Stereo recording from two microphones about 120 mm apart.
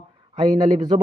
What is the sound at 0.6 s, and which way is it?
Speech, 35° right (ahead or behind).